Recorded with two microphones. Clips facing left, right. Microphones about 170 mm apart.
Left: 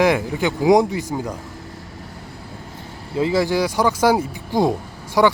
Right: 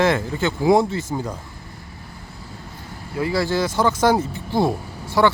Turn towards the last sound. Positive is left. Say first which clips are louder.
# left 1 dB
turn(degrees=15)  # may be behind; listen again after turning